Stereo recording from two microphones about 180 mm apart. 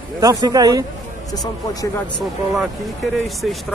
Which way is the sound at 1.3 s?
20° left (ahead or behind).